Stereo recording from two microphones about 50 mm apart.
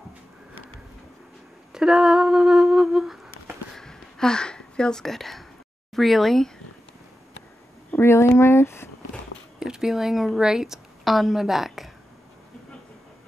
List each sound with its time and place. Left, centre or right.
1.7 s humming: centre
3.7 s a sound: centre
5.9 s speech: centre
8.0 s speech: left
9.6 s speech: centre